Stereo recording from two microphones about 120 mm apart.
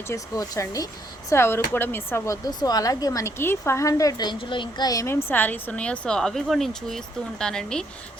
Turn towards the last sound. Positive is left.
turn(degrees=5)  # may be behind; listen again after turning